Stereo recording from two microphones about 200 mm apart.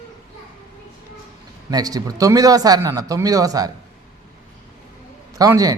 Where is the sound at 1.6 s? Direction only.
20° right (ahead or behind).